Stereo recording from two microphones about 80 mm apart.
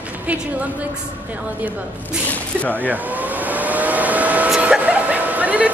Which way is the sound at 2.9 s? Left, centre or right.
Right.